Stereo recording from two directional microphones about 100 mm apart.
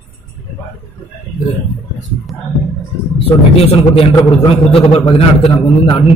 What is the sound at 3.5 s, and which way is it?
A man's voice, 75° left (ahead or behind).